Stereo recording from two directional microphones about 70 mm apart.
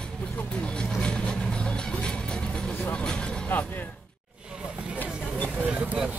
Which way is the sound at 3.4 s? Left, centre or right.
Left.